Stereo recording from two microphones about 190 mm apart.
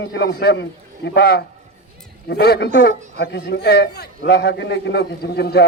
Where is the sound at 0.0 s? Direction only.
60° left (ahead or behind).